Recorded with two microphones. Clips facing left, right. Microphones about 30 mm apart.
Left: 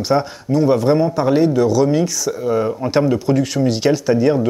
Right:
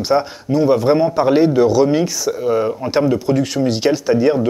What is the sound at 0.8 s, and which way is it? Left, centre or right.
Speech, right.